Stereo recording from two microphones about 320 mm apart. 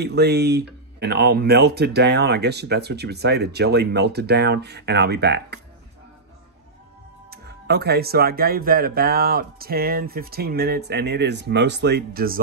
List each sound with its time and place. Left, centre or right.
0.0 s speech: right
7.2 s speech: right